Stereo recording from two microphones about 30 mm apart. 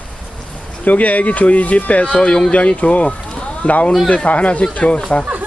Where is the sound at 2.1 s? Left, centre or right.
Left.